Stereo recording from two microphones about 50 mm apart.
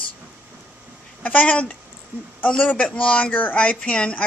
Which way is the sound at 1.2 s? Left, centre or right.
Left.